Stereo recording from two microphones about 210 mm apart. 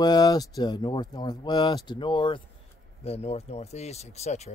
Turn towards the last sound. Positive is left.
turn(degrees=30)  # may be behind; listen again after turning